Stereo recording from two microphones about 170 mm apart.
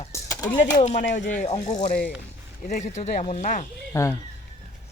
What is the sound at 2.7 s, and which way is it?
Speech, 45° left (ahead or behind).